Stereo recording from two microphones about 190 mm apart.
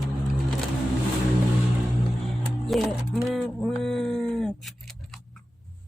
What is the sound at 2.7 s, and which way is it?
Speech, centre (ahead or behind).